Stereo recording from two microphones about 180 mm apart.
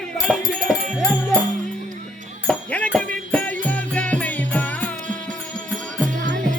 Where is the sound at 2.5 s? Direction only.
5° left (ahead or behind).